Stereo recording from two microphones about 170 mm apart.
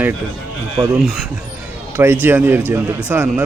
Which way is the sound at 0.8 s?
20° right (ahead or behind).